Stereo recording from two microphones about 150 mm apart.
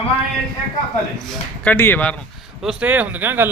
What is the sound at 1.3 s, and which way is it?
Speech, 10° left (ahead or behind).